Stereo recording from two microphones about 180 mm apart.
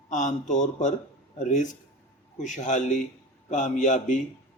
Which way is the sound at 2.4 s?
45° left (ahead or behind).